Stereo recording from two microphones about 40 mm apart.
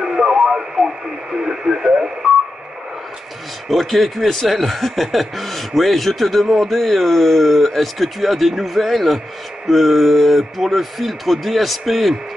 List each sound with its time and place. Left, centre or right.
0.0 s radio: centre
3.6 s speech: centre